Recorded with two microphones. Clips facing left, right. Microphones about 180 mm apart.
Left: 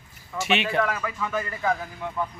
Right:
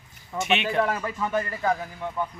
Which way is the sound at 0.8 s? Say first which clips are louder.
Right 1 dB; 30° right (ahead or behind).